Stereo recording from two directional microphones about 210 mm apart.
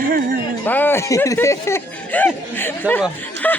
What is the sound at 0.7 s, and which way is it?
Speech, 10° left (ahead or behind).